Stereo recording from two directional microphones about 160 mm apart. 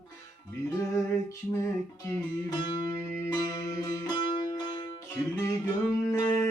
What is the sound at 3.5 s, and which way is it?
Music, 25° left (ahead or behind).